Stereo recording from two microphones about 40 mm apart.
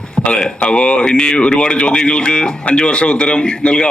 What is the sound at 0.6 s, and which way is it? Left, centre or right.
A man's voice, left.